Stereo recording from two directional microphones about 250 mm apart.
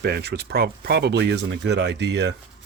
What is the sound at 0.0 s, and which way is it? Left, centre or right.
Speech, right.